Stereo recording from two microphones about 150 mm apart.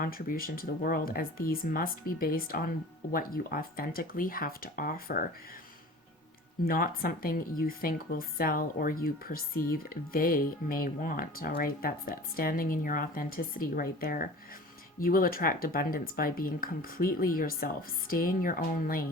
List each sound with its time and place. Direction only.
0.0 s speech: 70° left (ahead or behind)
6.7 s speech: 75° left (ahead or behind)